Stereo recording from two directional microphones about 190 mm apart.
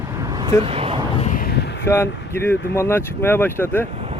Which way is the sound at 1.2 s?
40° left (ahead or behind).